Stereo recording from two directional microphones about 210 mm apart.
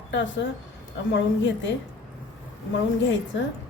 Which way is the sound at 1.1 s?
60° left (ahead or behind).